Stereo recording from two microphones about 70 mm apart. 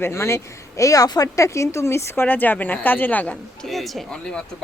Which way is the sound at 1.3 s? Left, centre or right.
Left.